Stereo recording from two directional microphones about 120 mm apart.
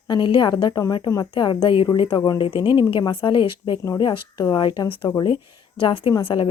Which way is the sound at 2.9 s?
40° left (ahead or behind).